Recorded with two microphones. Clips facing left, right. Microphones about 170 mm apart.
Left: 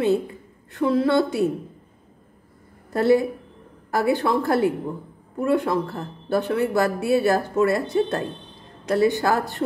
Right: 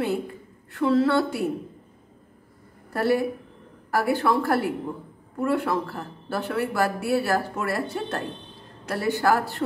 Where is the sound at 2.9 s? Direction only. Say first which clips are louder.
Left 4 dB; 20° left (ahead or behind).